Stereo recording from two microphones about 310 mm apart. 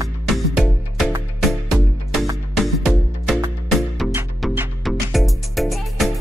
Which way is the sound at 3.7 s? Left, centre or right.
Centre.